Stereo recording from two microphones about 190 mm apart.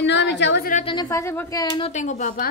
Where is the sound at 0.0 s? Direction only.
65° left (ahead or behind).